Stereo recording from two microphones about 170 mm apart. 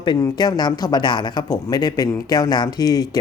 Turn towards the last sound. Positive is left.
turn(degrees=20)  # may be behind; listen again after turning